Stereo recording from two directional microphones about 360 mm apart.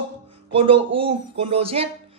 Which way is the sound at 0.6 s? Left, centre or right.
Centre.